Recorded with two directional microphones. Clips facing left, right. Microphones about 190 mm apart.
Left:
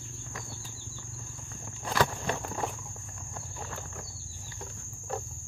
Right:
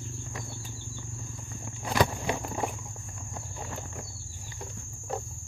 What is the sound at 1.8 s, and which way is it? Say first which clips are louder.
Walk: right 2 dB; 15° right (ahead or behind).